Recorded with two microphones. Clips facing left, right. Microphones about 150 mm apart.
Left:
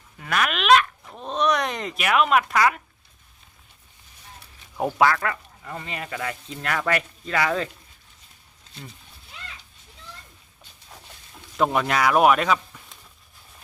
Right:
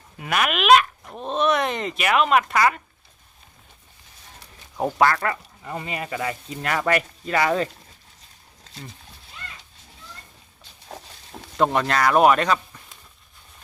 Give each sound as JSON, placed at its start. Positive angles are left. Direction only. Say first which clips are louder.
{"t": 0.2, "sound": "speech", "louder": "right 2 dB", "side_deg": -10}
{"t": 4.8, "sound": "speech", "louder": "right 1 dB", "side_deg": 0}
{"t": 10.8, "sound": "a sound", "louder": "right 8 dB", "side_deg": -70}
{"t": 11.5, "sound": "speech", "louder": "right 1 dB", "side_deg": 0}